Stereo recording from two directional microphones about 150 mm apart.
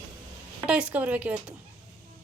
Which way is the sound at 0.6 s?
5° right (ahead or behind).